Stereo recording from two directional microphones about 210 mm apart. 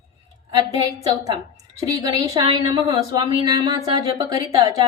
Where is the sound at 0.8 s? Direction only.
15° right (ahead or behind).